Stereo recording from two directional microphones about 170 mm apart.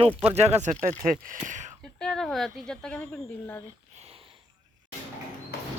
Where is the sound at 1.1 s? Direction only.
50° right (ahead or behind).